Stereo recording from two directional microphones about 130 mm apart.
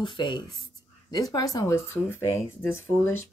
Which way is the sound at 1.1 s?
30° left (ahead or behind).